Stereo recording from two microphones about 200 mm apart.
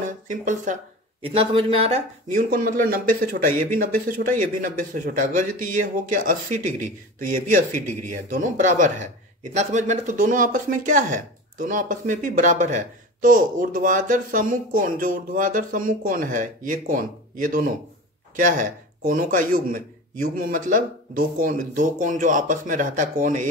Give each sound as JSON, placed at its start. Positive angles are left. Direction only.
{"t": 0.0, "sound": "speech", "side_deg": -40}
{"t": 1.2, "sound": "speech", "side_deg": -25}